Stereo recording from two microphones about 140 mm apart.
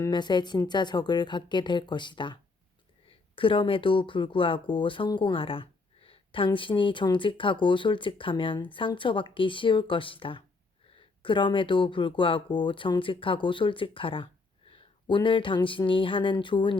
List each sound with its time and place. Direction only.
0.1 s speech: 30° left (ahead or behind)